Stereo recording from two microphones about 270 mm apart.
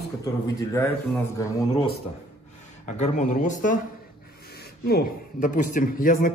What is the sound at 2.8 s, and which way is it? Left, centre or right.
Speech, left.